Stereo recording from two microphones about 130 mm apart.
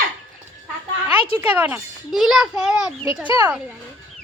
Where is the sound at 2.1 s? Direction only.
Centre (ahead or behind).